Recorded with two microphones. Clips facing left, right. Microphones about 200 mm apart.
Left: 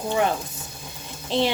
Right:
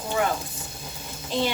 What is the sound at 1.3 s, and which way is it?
Speech, 25° left (ahead or behind).